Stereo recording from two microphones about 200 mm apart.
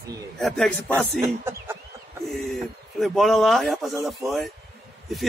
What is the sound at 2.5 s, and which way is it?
Speech, centre (ahead or behind).